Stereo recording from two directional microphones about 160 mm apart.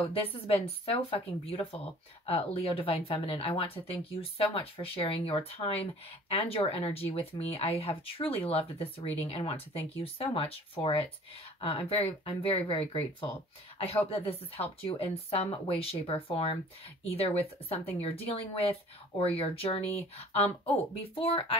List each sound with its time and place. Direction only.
0.1 s speech: 35° left (ahead or behind)
17.6 s speech: 40° left (ahead or behind)